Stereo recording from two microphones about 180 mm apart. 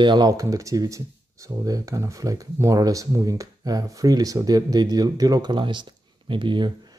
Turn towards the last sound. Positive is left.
turn(degrees=-25)  # may be behind; listen again after turning